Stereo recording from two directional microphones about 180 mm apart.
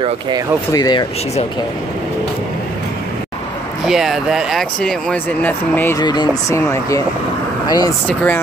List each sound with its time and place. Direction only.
0.7 s speech: 20° left (ahead or behind)
3.8 s speech: centre (ahead or behind); by 7.9 s 20° left (ahead or behind)
8.1 s speech: 5° left (ahead or behind)